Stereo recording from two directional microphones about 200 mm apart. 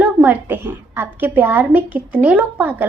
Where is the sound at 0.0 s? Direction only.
10° right (ahead or behind).